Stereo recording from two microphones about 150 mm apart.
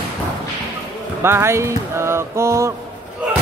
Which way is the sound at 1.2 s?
15° right (ahead or behind).